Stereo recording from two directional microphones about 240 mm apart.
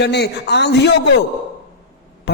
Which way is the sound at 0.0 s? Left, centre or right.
Left.